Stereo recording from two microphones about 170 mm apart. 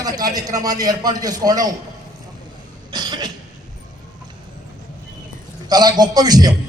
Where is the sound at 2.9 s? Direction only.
25° right (ahead or behind).